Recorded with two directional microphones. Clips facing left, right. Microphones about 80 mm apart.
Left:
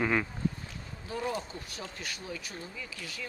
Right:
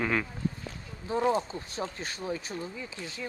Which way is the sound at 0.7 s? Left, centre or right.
Right.